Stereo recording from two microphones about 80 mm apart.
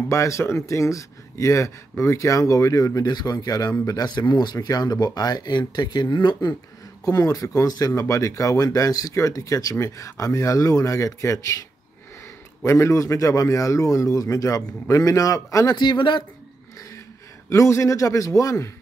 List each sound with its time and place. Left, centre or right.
0.1 s a man's voice: left
7.1 s a man's voice: left
7.6 s a man's voice: left
12.6 s a man's voice: left
17.5 s a man's voice: left